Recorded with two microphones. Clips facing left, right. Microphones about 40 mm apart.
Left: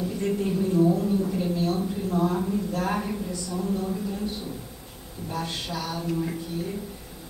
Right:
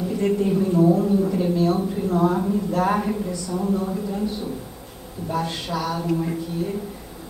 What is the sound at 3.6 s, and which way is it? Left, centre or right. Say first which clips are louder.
Speech: right 5 dB; right.